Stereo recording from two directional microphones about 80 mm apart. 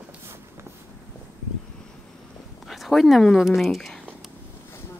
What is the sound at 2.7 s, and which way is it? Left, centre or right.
A woman's voice, centre.